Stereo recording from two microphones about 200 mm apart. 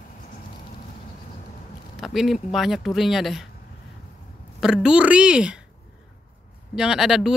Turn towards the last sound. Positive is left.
turn(degrees=0)  # may be behind; listen again after turning